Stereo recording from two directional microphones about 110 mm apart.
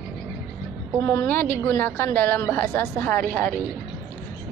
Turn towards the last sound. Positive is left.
turn(degrees=10)  # may be behind; listen again after turning